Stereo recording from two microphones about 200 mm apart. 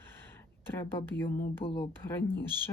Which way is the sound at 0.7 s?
10° left (ahead or behind).